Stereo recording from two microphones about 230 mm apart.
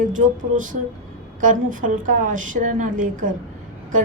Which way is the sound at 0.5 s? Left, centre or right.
Right.